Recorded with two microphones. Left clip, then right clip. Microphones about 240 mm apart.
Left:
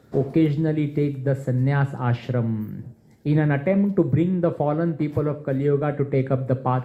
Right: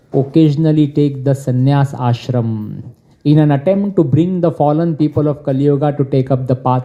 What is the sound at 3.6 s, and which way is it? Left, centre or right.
Speech, right.